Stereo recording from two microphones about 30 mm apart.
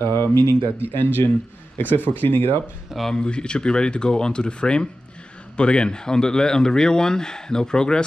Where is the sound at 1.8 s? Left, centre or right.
Right.